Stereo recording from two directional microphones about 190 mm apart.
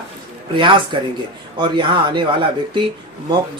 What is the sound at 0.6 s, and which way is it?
Speech, 25° right (ahead or behind).